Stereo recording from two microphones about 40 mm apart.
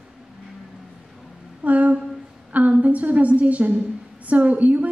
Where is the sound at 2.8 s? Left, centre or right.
Right.